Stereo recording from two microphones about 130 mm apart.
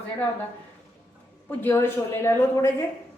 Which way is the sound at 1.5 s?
15° left (ahead or behind).